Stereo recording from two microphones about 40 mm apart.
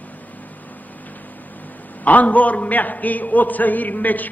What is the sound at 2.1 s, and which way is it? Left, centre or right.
A man's voice, left.